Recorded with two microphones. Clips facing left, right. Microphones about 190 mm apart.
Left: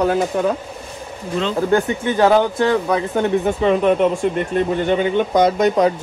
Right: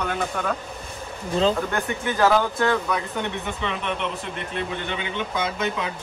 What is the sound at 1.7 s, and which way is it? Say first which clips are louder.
Speech: left 9 dB; 30° left (ahead or behind).